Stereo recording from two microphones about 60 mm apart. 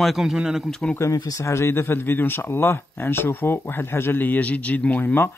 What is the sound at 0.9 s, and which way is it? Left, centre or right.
Speech, left.